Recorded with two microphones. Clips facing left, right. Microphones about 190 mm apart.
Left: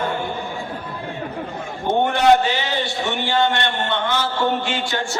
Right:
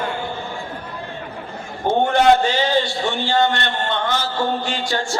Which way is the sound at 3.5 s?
45° right (ahead or behind).